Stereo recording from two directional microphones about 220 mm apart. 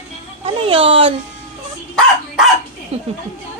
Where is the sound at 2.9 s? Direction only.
25° right (ahead or behind).